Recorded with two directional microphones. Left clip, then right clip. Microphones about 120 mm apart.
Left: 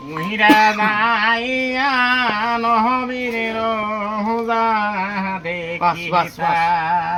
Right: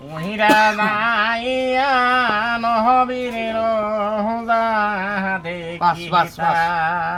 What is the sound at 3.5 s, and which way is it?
Speech, 25° right (ahead or behind).